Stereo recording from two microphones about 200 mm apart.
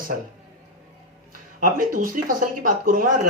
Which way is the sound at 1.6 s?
45° right (ahead or behind).